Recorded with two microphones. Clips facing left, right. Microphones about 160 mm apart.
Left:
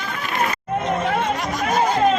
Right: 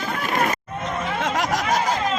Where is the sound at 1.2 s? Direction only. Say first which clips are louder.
Even; 90° right.